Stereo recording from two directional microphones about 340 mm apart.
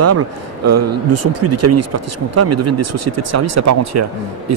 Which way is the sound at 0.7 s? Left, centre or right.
Right.